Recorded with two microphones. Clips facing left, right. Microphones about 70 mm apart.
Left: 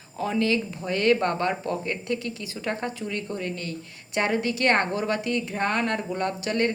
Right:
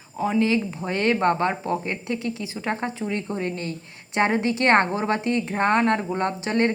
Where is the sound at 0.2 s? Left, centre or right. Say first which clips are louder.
Right 3 dB; centre.